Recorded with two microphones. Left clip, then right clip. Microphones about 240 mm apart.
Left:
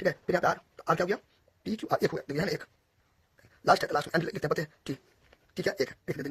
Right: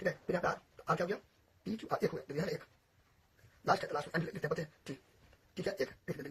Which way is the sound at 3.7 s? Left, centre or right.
Left.